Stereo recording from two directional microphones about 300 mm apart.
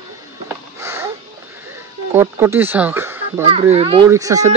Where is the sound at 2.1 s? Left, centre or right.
Centre.